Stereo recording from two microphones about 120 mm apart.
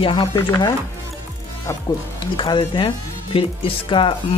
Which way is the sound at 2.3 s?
45° left (ahead or behind).